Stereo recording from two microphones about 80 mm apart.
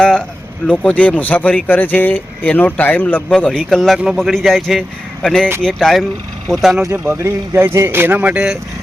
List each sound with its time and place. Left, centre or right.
0.0 s a man's voice: centre
3.3 s speech: centre
6.9 s a man's voice: right